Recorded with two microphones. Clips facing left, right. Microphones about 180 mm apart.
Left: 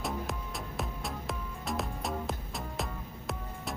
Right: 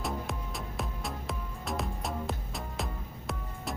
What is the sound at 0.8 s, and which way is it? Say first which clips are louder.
Music: even; centre (ahead or behind).